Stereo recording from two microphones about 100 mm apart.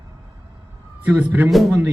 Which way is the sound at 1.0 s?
15° right (ahead or behind).